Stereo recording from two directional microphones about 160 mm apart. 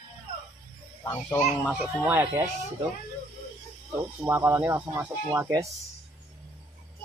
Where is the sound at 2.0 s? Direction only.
15° right (ahead or behind).